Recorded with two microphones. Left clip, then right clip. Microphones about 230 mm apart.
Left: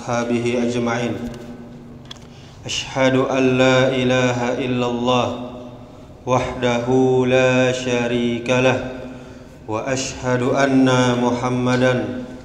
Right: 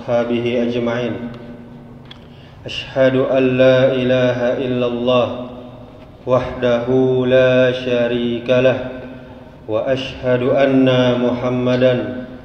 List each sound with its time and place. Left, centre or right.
0.0 s mantra: left
2.9 s mantra: left